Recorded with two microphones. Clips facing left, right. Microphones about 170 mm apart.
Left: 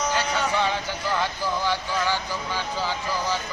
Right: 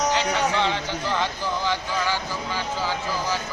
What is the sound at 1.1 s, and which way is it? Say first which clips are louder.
Speech: left 1 dB; 10° left (ahead or behind).